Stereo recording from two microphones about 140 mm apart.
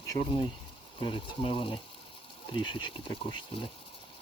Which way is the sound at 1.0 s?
40° left (ahead or behind).